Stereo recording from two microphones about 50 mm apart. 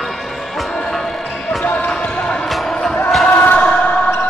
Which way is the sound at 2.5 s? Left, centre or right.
Centre.